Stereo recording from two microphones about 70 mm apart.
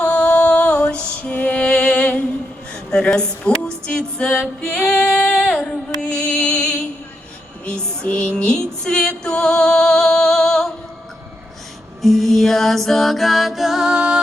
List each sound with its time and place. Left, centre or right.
0.0 s music: centre
4.6 s female singing: centre
5.5 s music: centre
12.0 s music: centre